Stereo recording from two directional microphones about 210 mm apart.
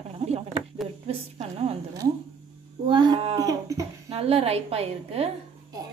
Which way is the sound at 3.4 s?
15° right (ahead or behind).